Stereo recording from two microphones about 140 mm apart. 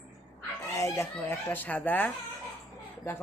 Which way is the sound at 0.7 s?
20° left (ahead or behind).